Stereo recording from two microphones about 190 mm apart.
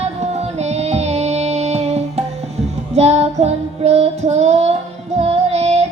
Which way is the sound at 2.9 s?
35° right (ahead or behind).